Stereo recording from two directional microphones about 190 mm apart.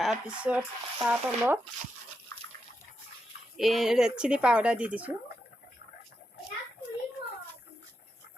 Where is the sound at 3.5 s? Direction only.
Centre (ahead or behind).